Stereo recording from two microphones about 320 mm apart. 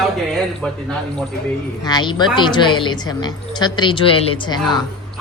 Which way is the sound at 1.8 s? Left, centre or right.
Centre.